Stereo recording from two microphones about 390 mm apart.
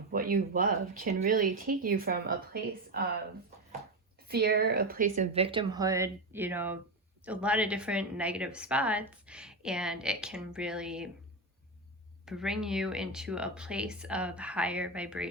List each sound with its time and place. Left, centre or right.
0.1 s speech: right
4.3 s a woman's voice: right; by 11.1 s centre
12.2 s a woman's voice: centre